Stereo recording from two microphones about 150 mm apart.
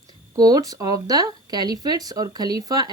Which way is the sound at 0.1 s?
25° right (ahead or behind).